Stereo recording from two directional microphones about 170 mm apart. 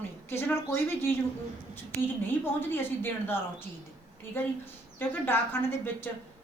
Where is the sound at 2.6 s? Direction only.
10° left (ahead or behind).